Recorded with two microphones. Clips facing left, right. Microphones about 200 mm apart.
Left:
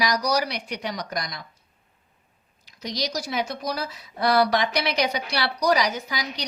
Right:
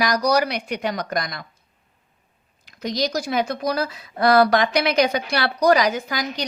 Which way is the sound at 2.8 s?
50° right (ahead or behind).